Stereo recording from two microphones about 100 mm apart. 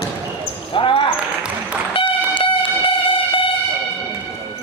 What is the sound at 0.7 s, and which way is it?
Basketball bounce, 60° left (ahead or behind).